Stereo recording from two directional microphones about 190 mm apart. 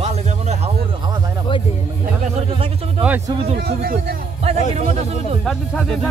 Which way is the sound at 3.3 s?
30° right (ahead or behind).